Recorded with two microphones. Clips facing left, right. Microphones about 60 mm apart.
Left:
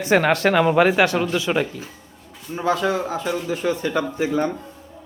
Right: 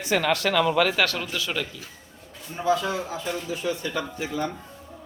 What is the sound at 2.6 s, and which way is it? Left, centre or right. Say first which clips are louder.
A man's voice: left 3 dB; left.